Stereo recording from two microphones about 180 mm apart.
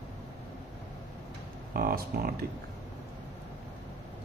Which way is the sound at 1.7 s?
55° right (ahead or behind).